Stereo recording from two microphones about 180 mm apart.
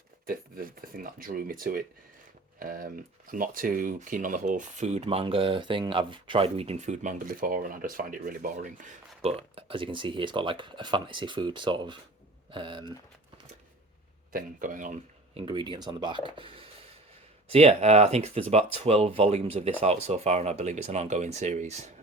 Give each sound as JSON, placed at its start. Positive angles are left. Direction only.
{"t": 0.3, "sound": "speech", "side_deg": -55}
{"t": 9.2, "sound": "speech", "side_deg": -30}
{"t": 14.3, "sound": "speech", "side_deg": -50}
{"t": 15.4, "sound": "speech", "side_deg": -25}
{"t": 16.4, "sound": "a sound", "side_deg": -30}
{"t": 17.5, "sound": "speech", "side_deg": -35}